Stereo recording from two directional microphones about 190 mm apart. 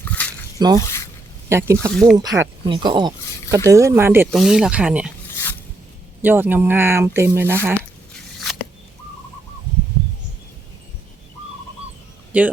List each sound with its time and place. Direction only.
0.0 s a sound: 10° left (ahead or behind)
0.8 s speech: 15° left (ahead or behind)
1.5 s speech: 15° right (ahead or behind)
1.9 s speech: centre (ahead or behind)
2.1 s speech: 20° right (ahead or behind)
4.3 s speech: centre (ahead or behind)
5.3 s a sound: 10° left (ahead or behind)
6.2 s speech: 10° right (ahead or behind)
7.8 s biting: 5° left (ahead or behind)
12.3 s speech: 10° right (ahead or behind)